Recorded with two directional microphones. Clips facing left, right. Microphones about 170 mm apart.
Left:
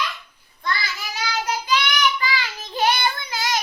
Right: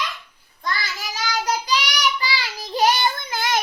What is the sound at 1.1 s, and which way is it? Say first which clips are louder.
Child singing: right 2 dB; 40° right (ahead or behind).